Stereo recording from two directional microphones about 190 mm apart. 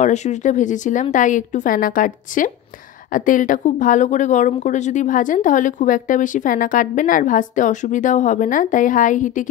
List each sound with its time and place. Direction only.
0.0 s a woman's voice: 40° left (ahead or behind)